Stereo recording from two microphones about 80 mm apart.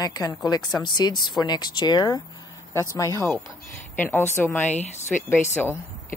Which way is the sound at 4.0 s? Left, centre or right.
Left.